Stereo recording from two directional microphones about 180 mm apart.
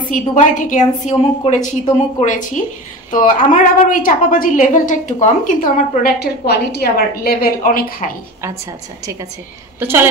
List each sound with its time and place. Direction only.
0.1 s a woman's voice: 45° left (ahead or behind)
9.8 s a woman's voice: 10° right (ahead or behind)